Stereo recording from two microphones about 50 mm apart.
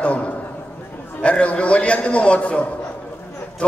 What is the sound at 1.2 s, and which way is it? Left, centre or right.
A man's voice, left.